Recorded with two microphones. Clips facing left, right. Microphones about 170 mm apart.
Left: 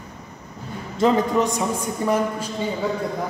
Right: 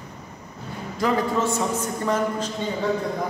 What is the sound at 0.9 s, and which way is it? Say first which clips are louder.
A woman's voice: left 4 dB; 20° left (ahead or behind).